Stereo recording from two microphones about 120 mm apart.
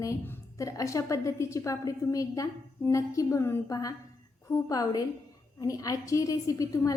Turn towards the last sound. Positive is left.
turn(degrees=30)  # may be behind; listen again after turning